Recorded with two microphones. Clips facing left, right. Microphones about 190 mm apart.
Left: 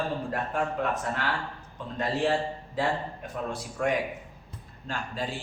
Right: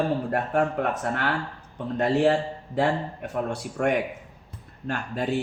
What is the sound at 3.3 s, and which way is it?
Speech, 60° right (ahead or behind).